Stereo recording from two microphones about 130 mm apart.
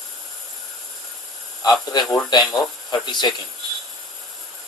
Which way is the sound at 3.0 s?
35° left (ahead or behind).